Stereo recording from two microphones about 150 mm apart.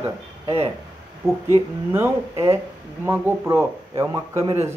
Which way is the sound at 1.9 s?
15° right (ahead or behind).